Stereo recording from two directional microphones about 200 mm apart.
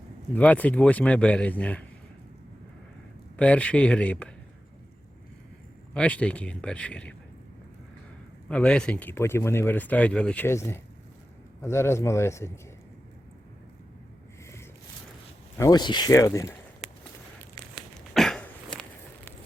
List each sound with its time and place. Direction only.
0.3 s speech: 5° left (ahead or behind)
3.3 s speech: 5° left (ahead or behind)
5.9 s a man's voice: 5° left (ahead or behind)
8.4 s speech: 5° left (ahead or behind)
15.5 s speech: 20° left (ahead or behind)
17.6 s a sound: centre (ahead or behind)